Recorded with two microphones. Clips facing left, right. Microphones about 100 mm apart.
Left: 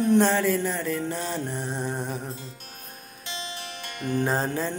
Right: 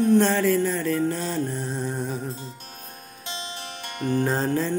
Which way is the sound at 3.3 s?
30° right (ahead or behind).